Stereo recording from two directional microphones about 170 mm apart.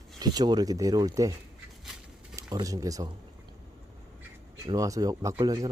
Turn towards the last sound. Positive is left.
turn(degrees=-20)  # may be behind; listen again after turning